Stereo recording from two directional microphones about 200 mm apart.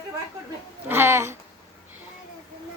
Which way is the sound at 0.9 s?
10° right (ahead or behind).